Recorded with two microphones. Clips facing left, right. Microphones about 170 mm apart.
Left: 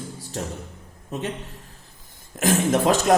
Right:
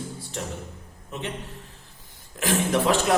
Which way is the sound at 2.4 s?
45° left (ahead or behind).